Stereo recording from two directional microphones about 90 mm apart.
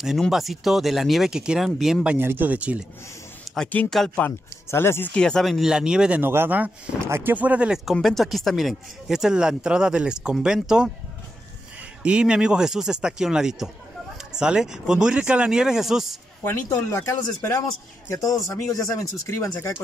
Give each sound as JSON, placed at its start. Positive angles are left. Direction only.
{"t": 0.0, "sound": "speech", "side_deg": -5}
{"t": 2.0, "sound": "speech", "side_deg": -20}
{"t": 3.5, "sound": "speech", "side_deg": 15}
{"t": 5.1, "sound": "speech", "side_deg": 5}
{"t": 6.2, "sound": "a man's voice", "side_deg": -25}
{"t": 7.8, "sound": "speech", "side_deg": 0}
{"t": 12.0, "sound": "speech", "side_deg": -10}
{"t": 16.4, "sound": "speech", "side_deg": 25}
{"t": 16.9, "sound": "a man's voice", "side_deg": 35}